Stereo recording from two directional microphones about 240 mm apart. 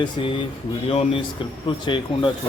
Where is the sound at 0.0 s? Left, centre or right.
Left.